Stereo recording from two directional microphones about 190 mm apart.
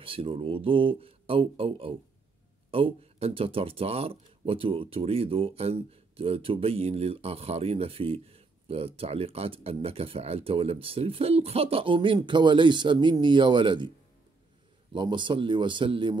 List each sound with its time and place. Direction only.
0.0 s speech: 30° right (ahead or behind)